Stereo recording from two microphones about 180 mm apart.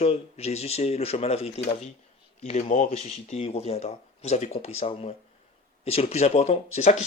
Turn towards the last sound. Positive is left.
turn(degrees=35)  # may be behind; listen again after turning